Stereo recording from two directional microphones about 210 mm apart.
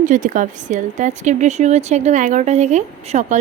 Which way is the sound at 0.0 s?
40° right (ahead or behind).